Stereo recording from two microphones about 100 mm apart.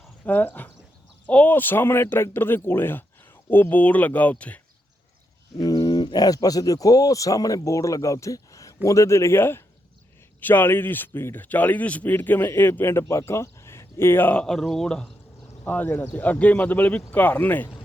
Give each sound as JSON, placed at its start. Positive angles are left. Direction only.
{"t": 0.3, "sound": "a man's voice", "side_deg": 15}
{"t": 5.5, "sound": "a man's voice", "side_deg": 45}
{"t": 14.4, "sound": "speech", "side_deg": 5}